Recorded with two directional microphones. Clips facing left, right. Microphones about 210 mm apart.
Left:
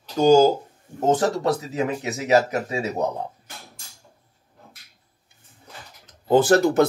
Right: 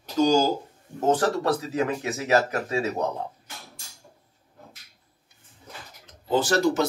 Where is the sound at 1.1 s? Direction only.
20° left (ahead or behind).